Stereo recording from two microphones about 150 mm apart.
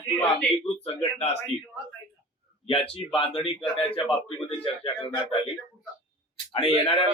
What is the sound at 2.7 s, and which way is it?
A man's voice, 40° left (ahead or behind).